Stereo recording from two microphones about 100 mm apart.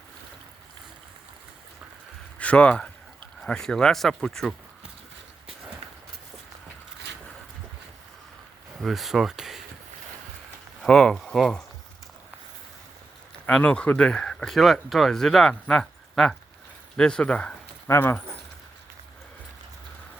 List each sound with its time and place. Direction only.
2.4 s speech: 15° left (ahead or behind)
8.8 s speech: centre (ahead or behind)
10.8 s speech: 5° left (ahead or behind)
13.5 s speech: 10° left (ahead or behind)
15.7 s a sound: 5° left (ahead or behind)
17.0 s speech: 10° left (ahead or behind)
17.8 s speech: 25° left (ahead or behind)